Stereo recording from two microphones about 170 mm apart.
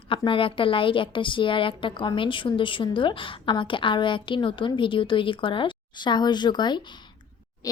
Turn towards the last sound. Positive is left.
turn(degrees=25)  # may be behind; listen again after turning